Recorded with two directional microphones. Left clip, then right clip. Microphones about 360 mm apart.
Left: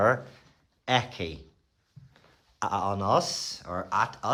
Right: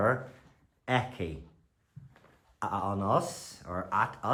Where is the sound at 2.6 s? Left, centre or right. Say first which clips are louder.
Left 4 dB; centre.